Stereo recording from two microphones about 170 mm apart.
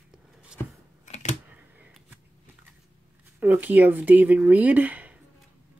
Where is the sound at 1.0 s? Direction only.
40° left (ahead or behind).